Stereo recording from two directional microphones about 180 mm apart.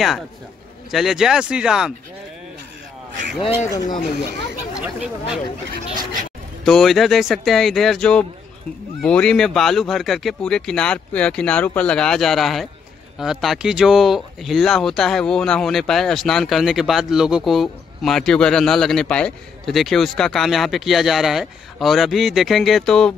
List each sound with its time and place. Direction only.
0.9 s speech: centre (ahead or behind)
3.6 s speech: 20° left (ahead or behind)
4.7 s speech: 5° right (ahead or behind)
6.6 s speech: centre (ahead or behind)